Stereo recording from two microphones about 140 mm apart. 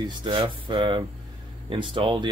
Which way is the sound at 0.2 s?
35° right (ahead or behind).